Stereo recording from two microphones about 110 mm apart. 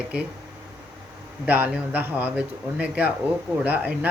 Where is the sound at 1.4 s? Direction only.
15° right (ahead or behind).